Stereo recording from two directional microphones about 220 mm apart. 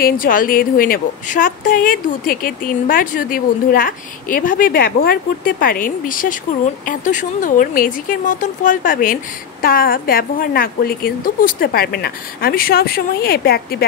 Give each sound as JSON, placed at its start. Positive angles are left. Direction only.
{"t": 0.0, "sound": "speech", "side_deg": 40}